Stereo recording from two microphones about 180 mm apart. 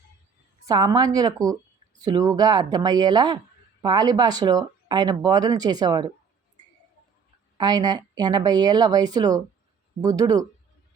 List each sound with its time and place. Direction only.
0.6 s speech: 20° right (ahead or behind)
7.6 s speech: 25° right (ahead or behind)